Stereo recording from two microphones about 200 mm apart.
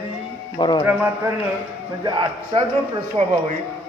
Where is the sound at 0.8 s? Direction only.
10° right (ahead or behind).